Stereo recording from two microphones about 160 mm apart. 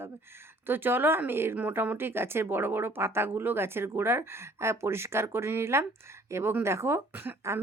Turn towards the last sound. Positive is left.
turn(degrees=-15)  # may be behind; listen again after turning